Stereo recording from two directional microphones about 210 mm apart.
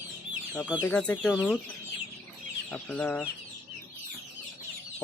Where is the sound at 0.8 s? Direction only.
10° left (ahead or behind).